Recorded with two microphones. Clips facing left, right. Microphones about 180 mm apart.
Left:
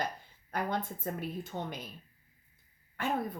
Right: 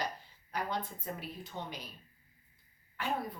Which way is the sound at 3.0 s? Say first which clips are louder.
Left 3 dB; 50° left (ahead or behind).